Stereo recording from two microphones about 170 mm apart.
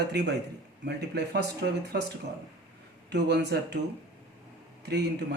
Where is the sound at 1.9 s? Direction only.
75° right (ahead or behind).